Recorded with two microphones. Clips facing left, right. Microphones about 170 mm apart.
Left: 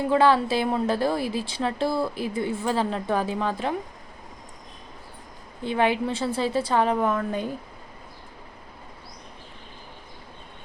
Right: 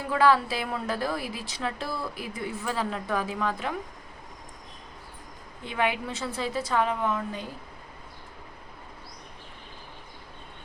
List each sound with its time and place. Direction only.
0.0 s a woman's voice: 25° left (ahead or behind)
5.6 s a woman's voice: 30° left (ahead or behind); by 7.4 s 50° left (ahead or behind)